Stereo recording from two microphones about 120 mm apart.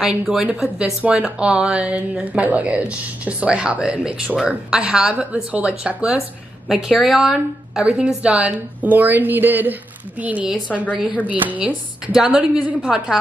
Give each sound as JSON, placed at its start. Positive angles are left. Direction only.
{"t": 0.0, "sound": "speech", "side_deg": -5}